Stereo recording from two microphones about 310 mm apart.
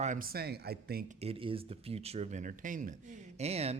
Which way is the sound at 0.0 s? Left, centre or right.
Right.